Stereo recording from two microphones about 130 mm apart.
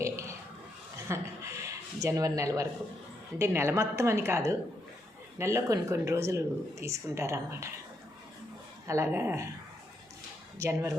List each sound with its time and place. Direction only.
0.0 s a sound: 25° right (ahead or behind)
3.3 s speech: 20° right (ahead or behind)
8.9 s speech: 20° right (ahead or behind)
10.6 s speech: 20° right (ahead or behind)